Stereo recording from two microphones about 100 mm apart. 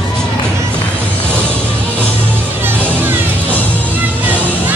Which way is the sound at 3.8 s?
15° right (ahead or behind).